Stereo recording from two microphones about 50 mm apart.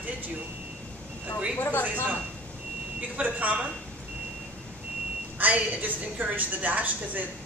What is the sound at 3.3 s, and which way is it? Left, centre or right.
Speech, right.